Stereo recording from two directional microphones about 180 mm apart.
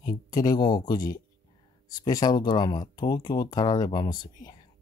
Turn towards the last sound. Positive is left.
turn(degrees=20)  # may be behind; listen again after turning